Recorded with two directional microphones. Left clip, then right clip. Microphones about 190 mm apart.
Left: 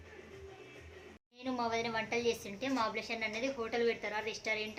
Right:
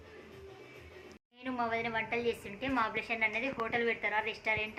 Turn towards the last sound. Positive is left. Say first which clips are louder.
# right 3 dB
turn(degrees=5)  # may be behind; listen again after turning